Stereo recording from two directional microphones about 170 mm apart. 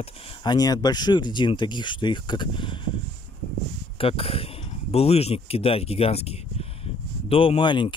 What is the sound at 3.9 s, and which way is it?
A man's voice, 35° left (ahead or behind).